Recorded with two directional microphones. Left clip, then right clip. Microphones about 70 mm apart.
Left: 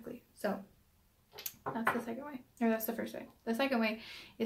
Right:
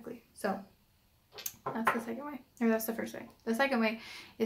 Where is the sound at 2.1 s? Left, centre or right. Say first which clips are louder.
Right 2 dB; centre.